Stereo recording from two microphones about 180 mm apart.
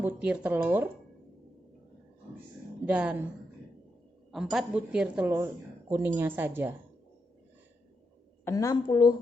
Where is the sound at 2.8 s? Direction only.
5° right (ahead or behind).